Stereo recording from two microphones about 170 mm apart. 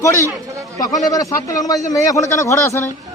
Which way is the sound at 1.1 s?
20° left (ahead or behind).